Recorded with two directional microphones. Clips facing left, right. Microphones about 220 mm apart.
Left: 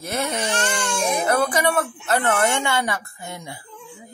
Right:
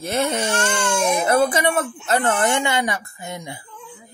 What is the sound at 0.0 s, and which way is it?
Speech, 25° right (ahead or behind).